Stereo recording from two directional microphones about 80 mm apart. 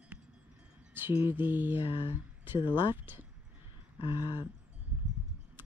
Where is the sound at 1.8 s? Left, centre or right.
Left.